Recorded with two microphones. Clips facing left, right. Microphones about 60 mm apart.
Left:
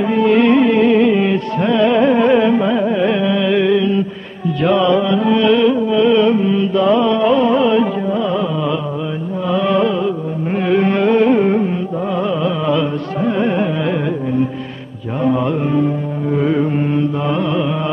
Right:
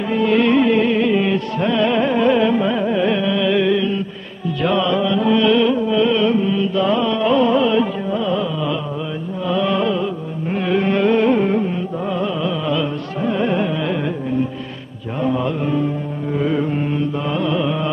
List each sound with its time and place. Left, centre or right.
0.0 s music: left
10.7 s carnatic music: centre
15.2 s mantra: centre
16.3 s carnatic music: centre